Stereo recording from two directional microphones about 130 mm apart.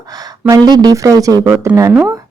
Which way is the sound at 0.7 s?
25° right (ahead or behind).